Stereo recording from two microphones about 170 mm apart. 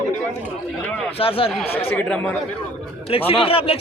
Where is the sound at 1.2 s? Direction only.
35° left (ahead or behind).